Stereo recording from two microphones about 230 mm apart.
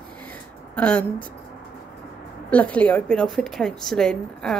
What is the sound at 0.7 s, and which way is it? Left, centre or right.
Speech, centre.